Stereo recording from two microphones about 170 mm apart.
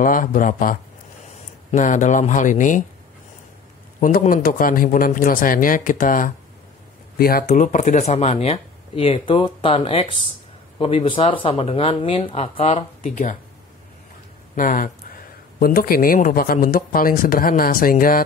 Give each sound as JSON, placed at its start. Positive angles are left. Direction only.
{"t": 0.0, "sound": "speech", "side_deg": 50}
{"t": 4.0, "sound": "speech", "side_deg": 55}
{"t": 14.5, "sound": "a sound", "side_deg": 50}
{"t": 15.6, "sound": "speech", "side_deg": 60}